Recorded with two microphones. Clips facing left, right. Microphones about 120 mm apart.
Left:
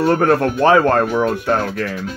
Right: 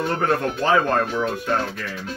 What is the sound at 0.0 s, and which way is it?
Speech, 70° left (ahead or behind).